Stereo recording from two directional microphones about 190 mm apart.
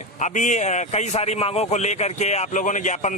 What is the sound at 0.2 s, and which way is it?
A man's voice, 40° left (ahead or behind).